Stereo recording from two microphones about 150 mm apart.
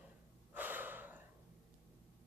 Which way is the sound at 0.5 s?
10° right (ahead or behind).